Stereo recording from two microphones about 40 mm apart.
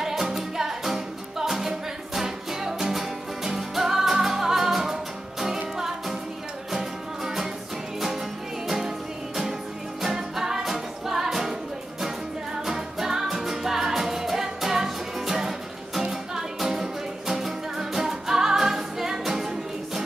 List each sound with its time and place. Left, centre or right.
0.0 s music: centre
8.6 s music: centre
10.0 s music: centre
12.6 s music: centre